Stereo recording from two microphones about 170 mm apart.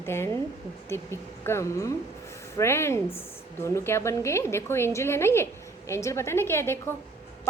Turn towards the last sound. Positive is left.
turn(degrees=15)  # may be behind; listen again after turning